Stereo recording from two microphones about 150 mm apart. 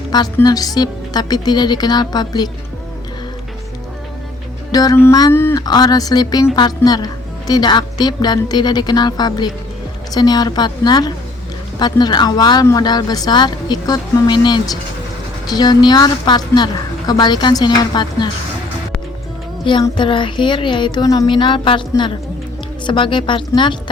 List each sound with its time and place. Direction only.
0.4 s speech: 25° left (ahead or behind)
4.7 s music: 25° left (ahead or behind)
5.3 s speech: 15° left (ahead or behind)
5.6 s speech: 25° left (ahead or behind)
19.7 s music: 35° left (ahead or behind)